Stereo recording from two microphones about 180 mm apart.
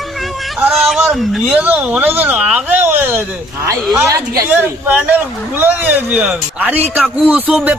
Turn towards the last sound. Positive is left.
turn(degrees=-5)  # may be behind; listen again after turning